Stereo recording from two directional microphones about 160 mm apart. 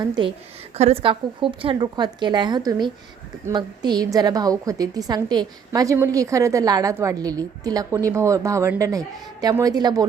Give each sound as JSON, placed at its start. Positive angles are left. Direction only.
{"t": 0.0, "sound": "a woman's voice", "side_deg": -30}